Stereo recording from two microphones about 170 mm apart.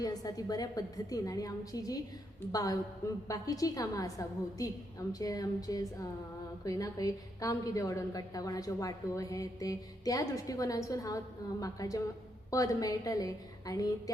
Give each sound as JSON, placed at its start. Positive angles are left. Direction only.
{"t": 0.0, "sound": "a woman's voice", "side_deg": 20}